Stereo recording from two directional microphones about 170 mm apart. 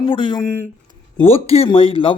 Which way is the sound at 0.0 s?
30° left (ahead or behind).